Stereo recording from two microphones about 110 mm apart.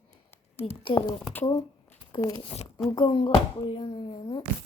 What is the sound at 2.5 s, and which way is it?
Speech, 70° left (ahead or behind).